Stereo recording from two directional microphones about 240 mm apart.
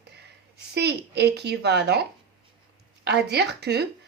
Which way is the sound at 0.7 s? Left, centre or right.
Right.